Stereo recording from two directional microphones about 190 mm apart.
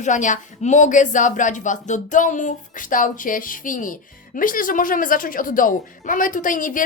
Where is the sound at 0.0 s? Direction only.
40° left (ahead or behind).